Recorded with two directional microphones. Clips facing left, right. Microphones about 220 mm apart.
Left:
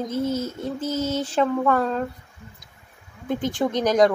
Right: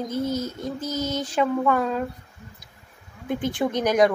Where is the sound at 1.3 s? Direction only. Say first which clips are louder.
Even; 5° right (ahead or behind).